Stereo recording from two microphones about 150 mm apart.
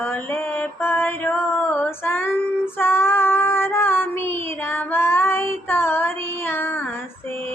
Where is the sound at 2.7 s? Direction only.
15° left (ahead or behind).